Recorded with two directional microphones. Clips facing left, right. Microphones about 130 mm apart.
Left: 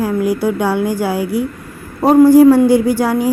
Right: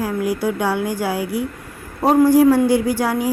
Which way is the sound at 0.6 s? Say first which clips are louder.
Left 5 dB; 40° left (ahead or behind).